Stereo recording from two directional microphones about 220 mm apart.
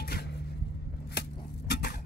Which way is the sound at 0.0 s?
45° left (ahead or behind).